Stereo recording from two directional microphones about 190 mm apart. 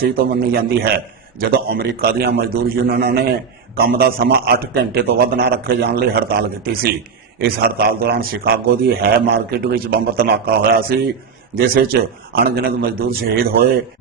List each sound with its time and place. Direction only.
0.1 s a man's voice: 55° right (ahead or behind)